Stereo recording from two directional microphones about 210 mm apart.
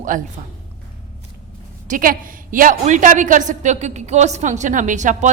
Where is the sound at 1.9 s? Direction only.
40° right (ahead or behind).